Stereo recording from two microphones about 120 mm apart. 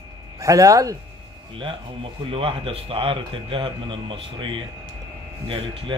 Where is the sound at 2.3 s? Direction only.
50° right (ahead or behind).